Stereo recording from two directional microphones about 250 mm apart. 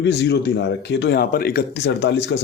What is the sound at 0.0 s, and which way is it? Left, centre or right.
Speech, left.